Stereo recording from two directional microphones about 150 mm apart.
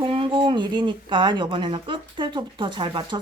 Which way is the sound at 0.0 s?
35° right (ahead or behind).